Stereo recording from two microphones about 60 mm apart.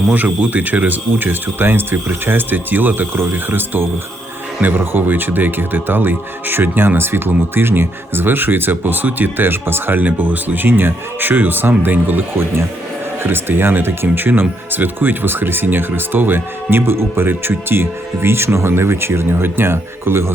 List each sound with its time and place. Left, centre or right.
0.1 s speech: right